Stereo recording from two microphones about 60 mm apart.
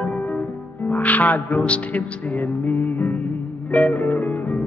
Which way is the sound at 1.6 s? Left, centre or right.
Left.